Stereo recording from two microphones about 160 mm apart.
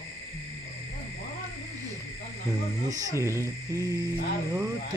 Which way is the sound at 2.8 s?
20° right (ahead or behind).